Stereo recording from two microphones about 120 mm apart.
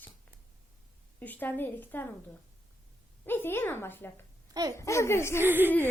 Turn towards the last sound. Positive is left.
turn(degrees=-15)  # may be behind; listen again after turning